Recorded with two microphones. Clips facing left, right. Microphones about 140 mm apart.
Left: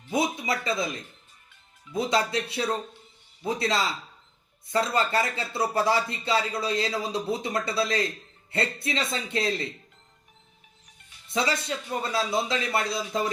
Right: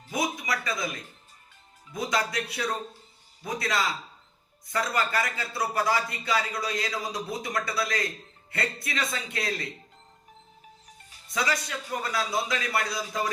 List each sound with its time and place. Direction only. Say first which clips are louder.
0.1 s speech: left 3 dB; 25° left (ahead or behind)
1.9 s speech: left 4 dB; 30° left (ahead or behind)
11.3 s speech: left 2 dB; 25° left (ahead or behind)